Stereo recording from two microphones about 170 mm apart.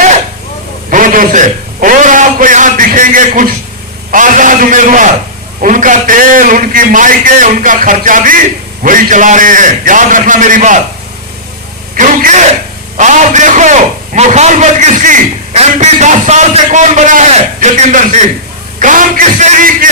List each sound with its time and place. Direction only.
0.9 s a sound: 50° right (ahead or behind)
4.1 s a man's voice: 50° right (ahead or behind)
11.9 s a man's voice: 50° right (ahead or behind)